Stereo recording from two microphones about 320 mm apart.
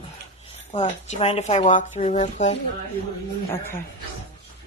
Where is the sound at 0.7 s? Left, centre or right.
Centre.